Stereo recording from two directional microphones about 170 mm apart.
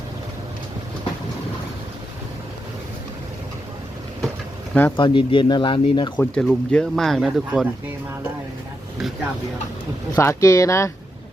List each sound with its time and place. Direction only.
4.7 s speech: 10° left (ahead or behind)
4.9 s speech: 30° left (ahead or behind)
6.1 s speech: 5° left (ahead or behind)
10.2 s speech: 15° left (ahead or behind)